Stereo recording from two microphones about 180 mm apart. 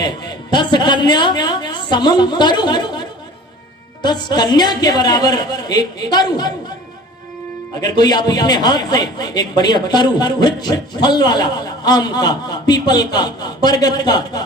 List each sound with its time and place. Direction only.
0.0 s a man's voice: 25° left (ahead or behind)
4.0 s a man's voice: 25° left (ahead or behind)
7.8 s a man's voice: 20° left (ahead or behind)